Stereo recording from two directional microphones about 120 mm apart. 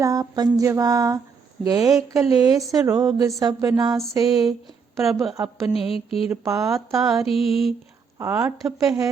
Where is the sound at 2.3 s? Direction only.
30° right (ahead or behind).